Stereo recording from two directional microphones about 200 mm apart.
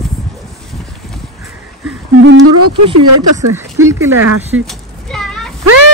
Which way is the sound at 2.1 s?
70° right (ahead or behind).